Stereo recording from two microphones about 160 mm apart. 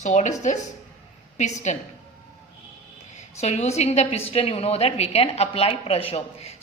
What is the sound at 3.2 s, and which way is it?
A woman's voice, 45° left (ahead or behind).